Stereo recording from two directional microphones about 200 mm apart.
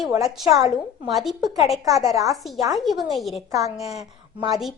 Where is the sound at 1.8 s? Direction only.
15° right (ahead or behind).